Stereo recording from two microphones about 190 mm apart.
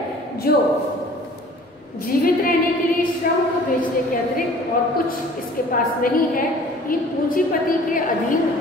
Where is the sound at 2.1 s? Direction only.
50° left (ahead or behind).